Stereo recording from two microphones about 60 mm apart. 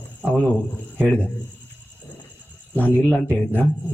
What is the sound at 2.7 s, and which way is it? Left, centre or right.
Speech, left.